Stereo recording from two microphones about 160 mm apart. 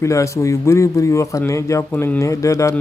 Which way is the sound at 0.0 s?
20° left (ahead or behind).